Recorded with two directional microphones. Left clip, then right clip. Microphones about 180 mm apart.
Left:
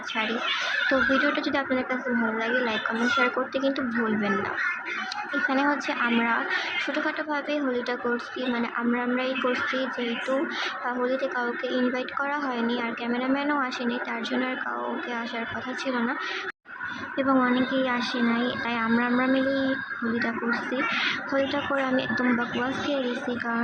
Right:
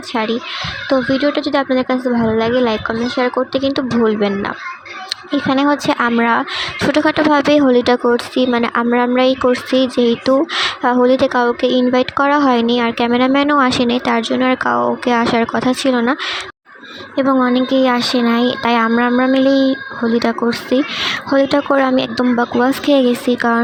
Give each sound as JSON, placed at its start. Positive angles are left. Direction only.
{"t": 0.9, "sound": "speech", "side_deg": -50}
{"t": 17.2, "sound": "speech", "side_deg": -50}